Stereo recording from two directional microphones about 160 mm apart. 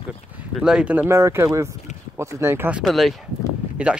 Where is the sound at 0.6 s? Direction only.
5° right (ahead or behind).